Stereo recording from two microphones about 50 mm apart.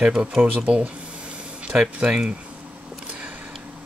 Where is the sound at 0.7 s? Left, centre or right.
Right.